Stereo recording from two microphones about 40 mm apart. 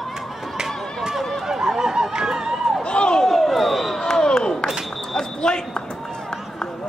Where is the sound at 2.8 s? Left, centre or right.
Left.